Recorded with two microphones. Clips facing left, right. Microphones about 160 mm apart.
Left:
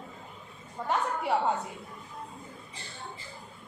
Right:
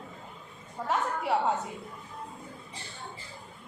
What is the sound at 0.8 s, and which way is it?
Speech, centre (ahead or behind).